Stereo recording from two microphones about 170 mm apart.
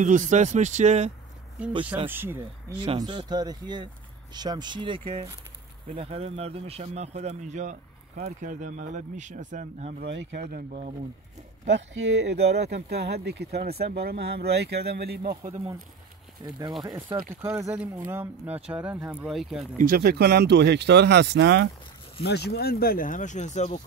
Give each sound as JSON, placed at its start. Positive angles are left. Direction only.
{"t": 0.0, "sound": "speech", "side_deg": -45}
{"t": 2.0, "sound": "speech", "side_deg": -15}
{"t": 3.0, "sound": "speech", "side_deg": -25}
{"t": 9.9, "sound": "speech", "side_deg": -80}
{"t": 10.5, "sound": "speech", "side_deg": -50}
{"t": 11.6, "sound": "speech", "side_deg": -90}
{"t": 15.4, "sound": "speech", "side_deg": -40}
{"t": 16.8, "sound": "speech", "side_deg": -25}
{"t": 19.8, "sound": "speech", "side_deg": -60}
{"t": 22.2, "sound": "speech", "side_deg": 75}